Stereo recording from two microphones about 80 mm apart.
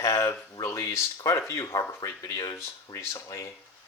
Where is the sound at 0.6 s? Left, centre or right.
Left.